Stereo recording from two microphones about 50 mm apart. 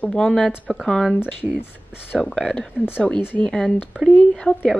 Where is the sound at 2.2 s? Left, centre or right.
Centre.